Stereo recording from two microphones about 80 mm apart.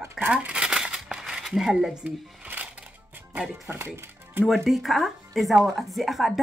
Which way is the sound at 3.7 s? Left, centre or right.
Right.